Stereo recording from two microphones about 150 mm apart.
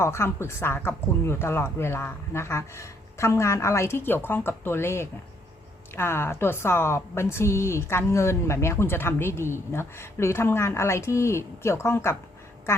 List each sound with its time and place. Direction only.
0.0 s a woman's voice: 15° left (ahead or behind)